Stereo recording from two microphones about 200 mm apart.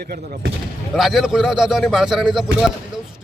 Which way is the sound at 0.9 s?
Centre (ahead or behind).